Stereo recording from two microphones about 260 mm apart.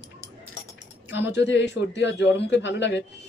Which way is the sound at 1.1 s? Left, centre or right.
Left.